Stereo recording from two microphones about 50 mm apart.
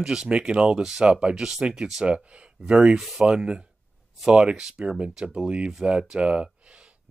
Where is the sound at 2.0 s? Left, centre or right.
Right.